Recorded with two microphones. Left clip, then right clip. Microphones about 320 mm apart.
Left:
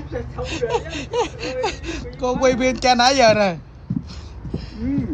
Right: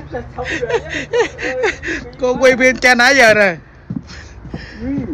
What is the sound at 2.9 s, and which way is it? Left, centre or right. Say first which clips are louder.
Speech: right 4 dB; right.